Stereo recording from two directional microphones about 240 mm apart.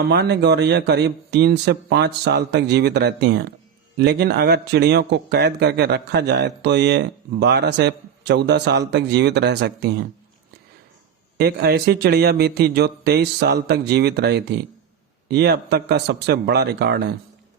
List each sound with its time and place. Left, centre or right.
0.0 s speech: right
11.3 s speech: right